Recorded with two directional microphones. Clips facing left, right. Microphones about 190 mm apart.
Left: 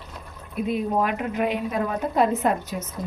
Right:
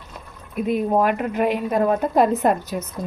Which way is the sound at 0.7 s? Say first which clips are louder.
Right 5 dB; 50° right (ahead or behind).